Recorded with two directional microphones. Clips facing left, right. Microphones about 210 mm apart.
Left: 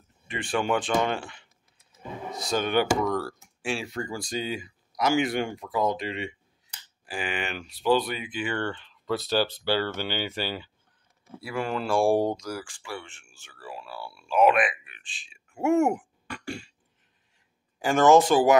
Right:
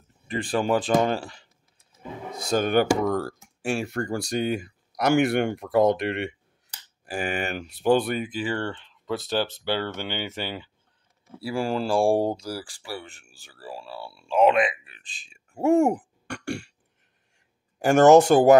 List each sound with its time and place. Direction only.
0.3 s speech: 35° right (ahead or behind)
2.5 s speech: 45° right (ahead or behind)
3.8 s speech: 60° right (ahead or behind)
7.1 s speech: 45° right (ahead or behind); by 10.7 s 20° right (ahead or behind)
11.4 s speech: 30° right (ahead or behind)
18.3 s speech: 50° right (ahead or behind)